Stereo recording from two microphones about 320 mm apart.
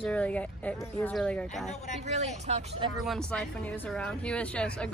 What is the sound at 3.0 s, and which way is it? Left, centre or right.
Speech, centre.